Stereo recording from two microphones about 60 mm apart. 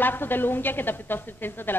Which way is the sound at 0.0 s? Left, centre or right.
Left.